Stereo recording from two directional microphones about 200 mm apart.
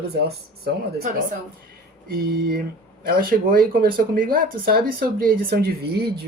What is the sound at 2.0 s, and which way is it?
Speech, 50° right (ahead or behind).